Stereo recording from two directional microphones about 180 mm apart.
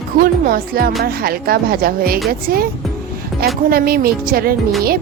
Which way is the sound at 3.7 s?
55° right (ahead or behind).